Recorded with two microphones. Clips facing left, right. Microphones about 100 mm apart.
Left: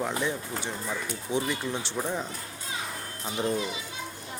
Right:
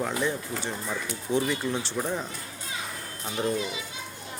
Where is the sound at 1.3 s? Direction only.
15° left (ahead or behind).